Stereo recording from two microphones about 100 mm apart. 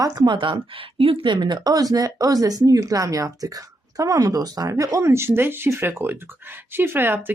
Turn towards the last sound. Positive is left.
turn(degrees=-20)  # may be behind; listen again after turning